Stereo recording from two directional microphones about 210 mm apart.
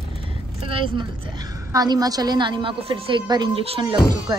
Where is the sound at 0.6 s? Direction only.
25° right (ahead or behind).